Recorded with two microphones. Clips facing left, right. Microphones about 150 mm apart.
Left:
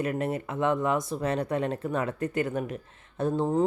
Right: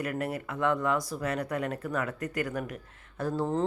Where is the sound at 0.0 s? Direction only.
25° left (ahead or behind).